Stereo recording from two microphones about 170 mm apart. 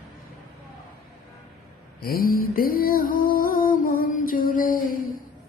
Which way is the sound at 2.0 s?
60° left (ahead or behind).